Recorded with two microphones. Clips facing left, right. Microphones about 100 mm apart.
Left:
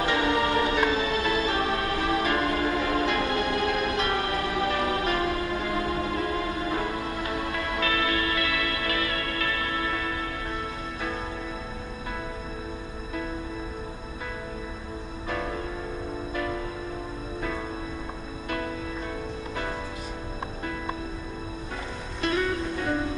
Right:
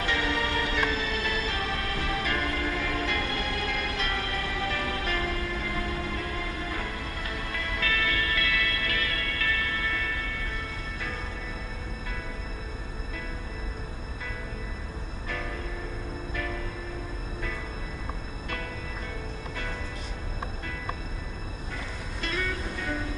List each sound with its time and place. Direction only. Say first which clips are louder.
0.0 s music: left 5 dB; 20° left (ahead or behind)
15.2 s music: left 5 dB; 25° left (ahead or behind)
22.2 s music: left 7 dB; 20° left (ahead or behind)